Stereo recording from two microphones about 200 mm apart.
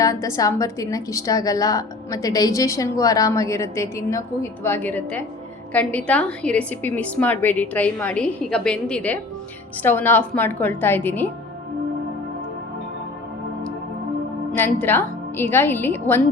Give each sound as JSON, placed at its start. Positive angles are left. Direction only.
{"t": 0.0, "sound": "a woman's voice", "side_deg": 15}
{"t": 14.5, "sound": "a woman's voice", "side_deg": 10}